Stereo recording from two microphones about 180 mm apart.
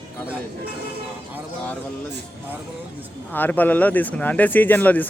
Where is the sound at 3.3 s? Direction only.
10° left (ahead or behind).